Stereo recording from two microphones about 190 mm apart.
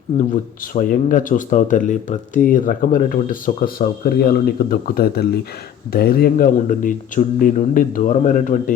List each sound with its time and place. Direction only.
0.2 s speech: 45° left (ahead or behind)